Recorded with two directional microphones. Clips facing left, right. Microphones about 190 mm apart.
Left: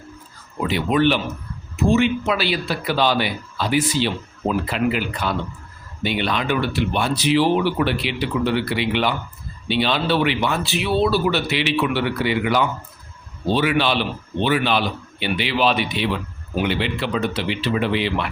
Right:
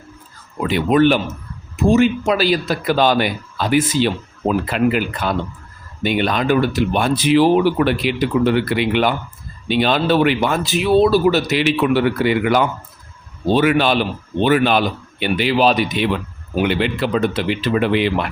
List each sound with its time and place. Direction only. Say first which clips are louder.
0.7 s speech: right 5 dB; 45° right (ahead or behind)